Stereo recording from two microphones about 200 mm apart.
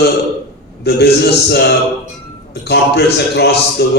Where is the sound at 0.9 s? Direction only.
55° left (ahead or behind).